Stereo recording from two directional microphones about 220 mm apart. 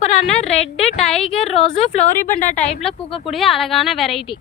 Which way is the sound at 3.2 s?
Centre (ahead or behind).